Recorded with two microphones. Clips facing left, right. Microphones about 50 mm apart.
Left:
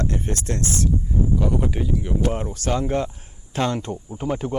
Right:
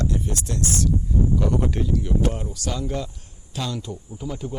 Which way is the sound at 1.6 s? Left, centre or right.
Centre.